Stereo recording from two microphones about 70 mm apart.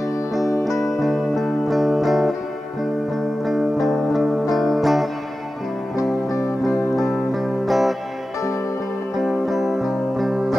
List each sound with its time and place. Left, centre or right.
0.9 s music: centre
3.4 s music: centre
6.6 s music: centre
9.1 s music: centre